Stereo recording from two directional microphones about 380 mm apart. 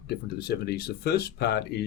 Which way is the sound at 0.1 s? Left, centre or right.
Left.